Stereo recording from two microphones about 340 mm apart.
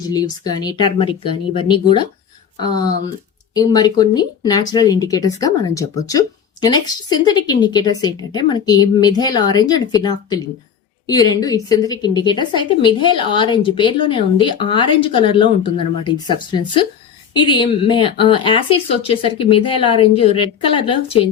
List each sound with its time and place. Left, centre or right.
0.0 s speech: centre
3.5 s speech: centre